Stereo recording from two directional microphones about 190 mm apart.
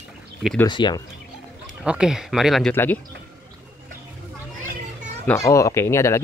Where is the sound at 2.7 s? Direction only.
10° left (ahead or behind).